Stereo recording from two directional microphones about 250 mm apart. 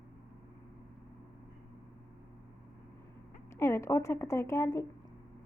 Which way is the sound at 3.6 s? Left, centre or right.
Centre.